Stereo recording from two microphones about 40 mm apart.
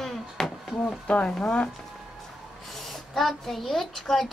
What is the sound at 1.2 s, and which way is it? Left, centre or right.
Speech, centre.